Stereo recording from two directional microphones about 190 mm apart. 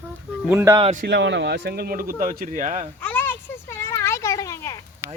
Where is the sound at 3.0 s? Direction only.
10° left (ahead or behind).